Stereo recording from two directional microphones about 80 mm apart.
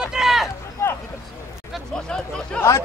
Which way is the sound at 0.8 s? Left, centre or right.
Left.